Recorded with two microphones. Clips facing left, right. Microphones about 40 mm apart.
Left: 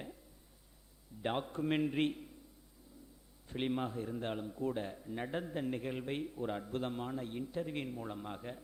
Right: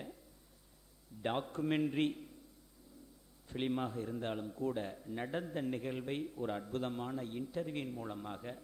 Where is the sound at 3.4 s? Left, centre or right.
Centre.